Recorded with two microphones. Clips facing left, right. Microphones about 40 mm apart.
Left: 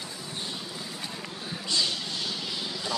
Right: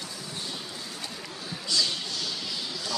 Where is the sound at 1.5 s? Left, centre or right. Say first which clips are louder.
Even; left.